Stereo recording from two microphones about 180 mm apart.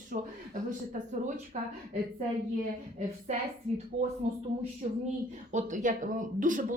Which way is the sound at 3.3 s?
40° right (ahead or behind).